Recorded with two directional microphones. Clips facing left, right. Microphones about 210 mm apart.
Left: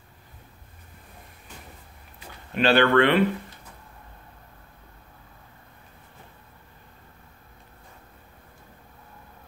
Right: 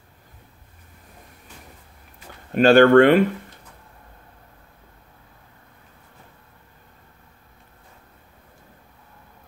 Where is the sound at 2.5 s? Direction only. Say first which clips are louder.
Right 7 dB; 45° right (ahead or behind).